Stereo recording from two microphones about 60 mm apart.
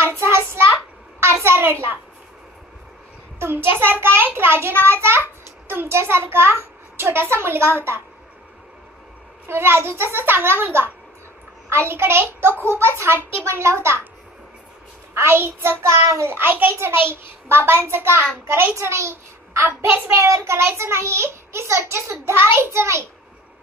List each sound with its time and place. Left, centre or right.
0.0 s child singing: right
1.2 s a sound: right
3.3 s a child's voice: right
9.5 s a child's voice: right
15.1 s a child's voice: right